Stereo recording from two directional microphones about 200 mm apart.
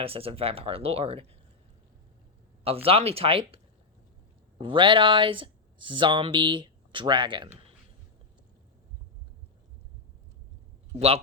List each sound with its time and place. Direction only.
0.0 s speech: 30° right (ahead or behind)
2.6 s speech: 30° right (ahead or behind)